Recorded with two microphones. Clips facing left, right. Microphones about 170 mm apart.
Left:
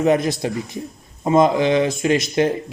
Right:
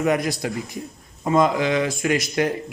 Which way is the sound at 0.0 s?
25° left (ahead or behind).